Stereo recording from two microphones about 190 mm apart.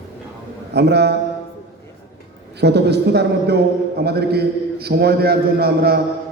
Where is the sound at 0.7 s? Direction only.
60° right (ahead or behind).